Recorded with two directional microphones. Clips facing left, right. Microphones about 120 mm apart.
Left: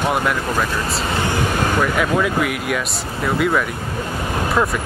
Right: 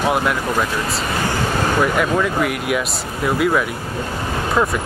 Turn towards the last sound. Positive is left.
turn(degrees=-5)  # may be behind; listen again after turning